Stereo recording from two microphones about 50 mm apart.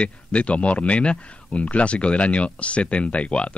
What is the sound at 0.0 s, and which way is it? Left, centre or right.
Speech, left.